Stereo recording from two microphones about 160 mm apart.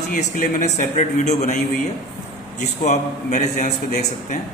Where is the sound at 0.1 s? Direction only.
55° left (ahead or behind).